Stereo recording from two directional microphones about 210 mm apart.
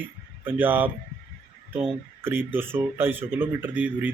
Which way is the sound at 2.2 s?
10° right (ahead or behind).